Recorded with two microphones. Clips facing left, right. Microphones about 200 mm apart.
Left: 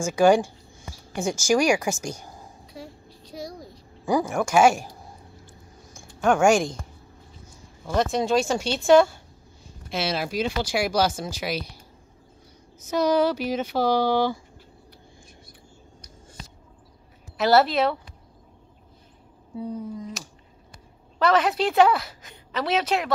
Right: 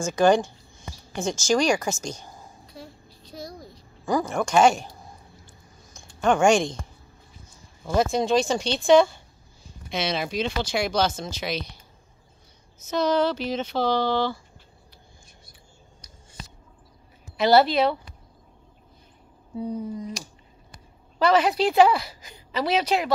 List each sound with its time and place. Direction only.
0.0 s a sound: 10° left (ahead or behind)
4.0 s speech: 10° left (ahead or behind)
5.9 s speech: 5° left (ahead or behind)
7.9 s a woman's voice: centre (ahead or behind)
12.9 s speech: 10° left (ahead or behind)
17.4 s a woman's voice: centre (ahead or behind)
19.8 s a woman's voice: centre (ahead or behind)